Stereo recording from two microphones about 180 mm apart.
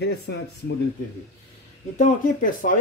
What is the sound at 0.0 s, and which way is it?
Speech, 65° left (ahead or behind).